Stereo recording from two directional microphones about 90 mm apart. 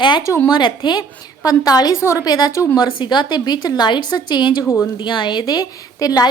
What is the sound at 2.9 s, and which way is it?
A woman's voice, 65° left (ahead or behind).